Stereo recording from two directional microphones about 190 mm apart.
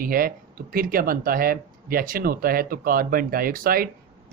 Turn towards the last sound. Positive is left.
turn(degrees=-50)  # may be behind; listen again after turning